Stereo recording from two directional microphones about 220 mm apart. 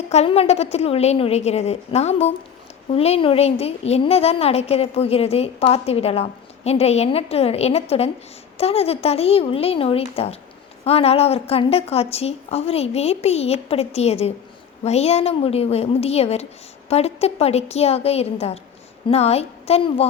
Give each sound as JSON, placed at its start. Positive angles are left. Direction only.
{"t": 0.1, "sound": "a child's voice", "side_deg": 30}